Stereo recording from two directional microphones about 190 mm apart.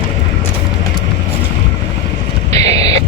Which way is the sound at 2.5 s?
35° right (ahead or behind).